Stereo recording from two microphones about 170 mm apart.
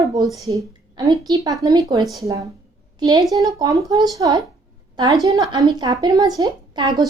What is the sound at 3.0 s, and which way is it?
A woman's voice, 20° right (ahead or behind).